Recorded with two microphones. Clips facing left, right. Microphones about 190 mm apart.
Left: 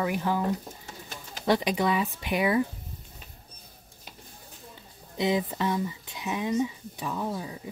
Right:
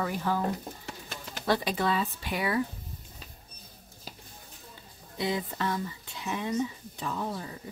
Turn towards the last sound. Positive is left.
turn(degrees=10)  # may be behind; listen again after turning